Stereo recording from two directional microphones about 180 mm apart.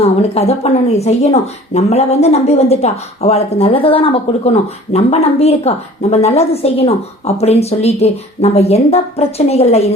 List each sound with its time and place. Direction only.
0.0 s speech: 35° left (ahead or behind)